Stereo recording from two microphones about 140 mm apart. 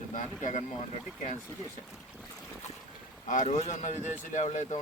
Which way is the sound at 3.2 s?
60° left (ahead or behind).